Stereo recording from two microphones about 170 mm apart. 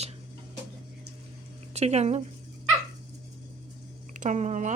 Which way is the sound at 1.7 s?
40° right (ahead or behind).